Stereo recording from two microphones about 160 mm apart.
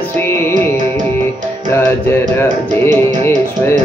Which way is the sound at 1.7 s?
15° left (ahead or behind).